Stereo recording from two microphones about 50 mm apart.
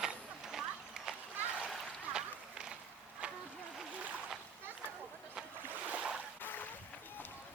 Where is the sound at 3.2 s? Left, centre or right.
Right.